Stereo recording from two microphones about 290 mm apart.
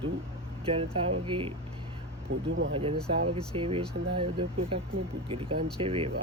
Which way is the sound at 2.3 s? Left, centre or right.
Right.